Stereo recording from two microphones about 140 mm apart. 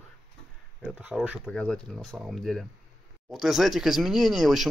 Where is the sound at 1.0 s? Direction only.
10° right (ahead or behind).